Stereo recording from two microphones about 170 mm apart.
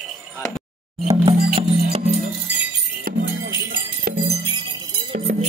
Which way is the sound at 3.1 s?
65° right (ahead or behind).